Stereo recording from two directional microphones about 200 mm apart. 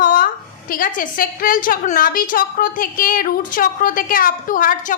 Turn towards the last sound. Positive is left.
turn(degrees=40)  # may be behind; listen again after turning